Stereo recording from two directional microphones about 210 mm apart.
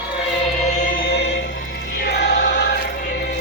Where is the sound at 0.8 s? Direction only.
40° left (ahead or behind).